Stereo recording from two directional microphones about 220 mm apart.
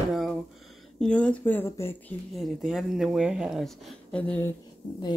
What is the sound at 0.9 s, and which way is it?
Speech, 5° left (ahead or behind).